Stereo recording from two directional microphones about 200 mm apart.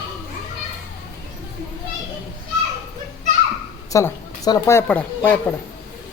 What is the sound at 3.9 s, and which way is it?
A woman's voice, 15° left (ahead or behind).